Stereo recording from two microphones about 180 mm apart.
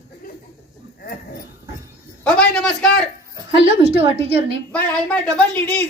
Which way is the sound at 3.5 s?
35° right (ahead or behind).